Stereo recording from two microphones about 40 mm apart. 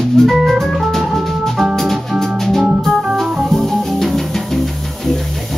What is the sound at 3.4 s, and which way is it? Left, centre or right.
Music, centre.